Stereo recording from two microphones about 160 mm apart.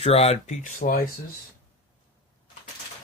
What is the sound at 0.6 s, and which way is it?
Speech, 55° left (ahead or behind).